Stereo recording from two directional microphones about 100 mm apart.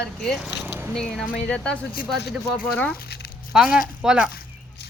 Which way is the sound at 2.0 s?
5° right (ahead or behind).